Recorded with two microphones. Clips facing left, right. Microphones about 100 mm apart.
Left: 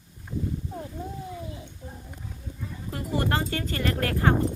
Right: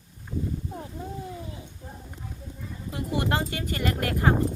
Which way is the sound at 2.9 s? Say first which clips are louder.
Even; 20° right (ahead or behind).